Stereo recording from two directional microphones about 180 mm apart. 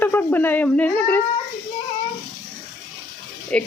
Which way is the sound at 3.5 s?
5° left (ahead or behind).